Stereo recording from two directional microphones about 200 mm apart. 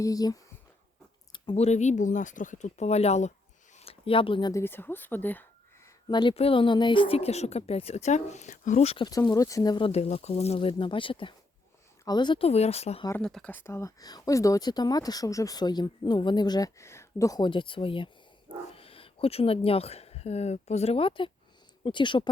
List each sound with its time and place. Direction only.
0.0 s a woman's voice: 20° left (ahead or behind)
1.3 s a woman's voice: 30° left (ahead or behind); by 5.5 s 10° left (ahead or behind)
6.1 s a woman's voice: 20° left (ahead or behind)
9.0 s speech: 20° left (ahead or behind)
13.1 s speech: 5° left (ahead or behind); by 22.3 s 25° left (ahead or behind)